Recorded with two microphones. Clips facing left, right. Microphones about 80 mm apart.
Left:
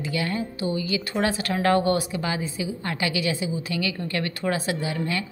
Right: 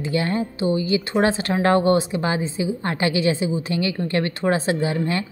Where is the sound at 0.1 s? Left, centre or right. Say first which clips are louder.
Right 6 dB; right.